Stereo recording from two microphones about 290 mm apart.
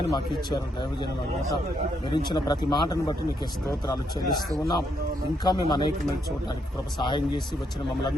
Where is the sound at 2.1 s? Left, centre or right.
Centre.